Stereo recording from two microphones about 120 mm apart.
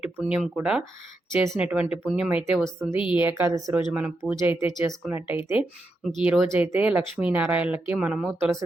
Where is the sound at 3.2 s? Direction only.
15° right (ahead or behind).